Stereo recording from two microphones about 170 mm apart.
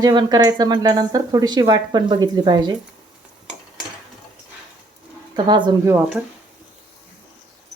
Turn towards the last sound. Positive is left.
turn(degrees=-15)  # may be behind; listen again after turning